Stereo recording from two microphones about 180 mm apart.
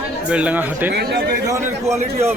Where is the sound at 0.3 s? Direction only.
5° right (ahead or behind).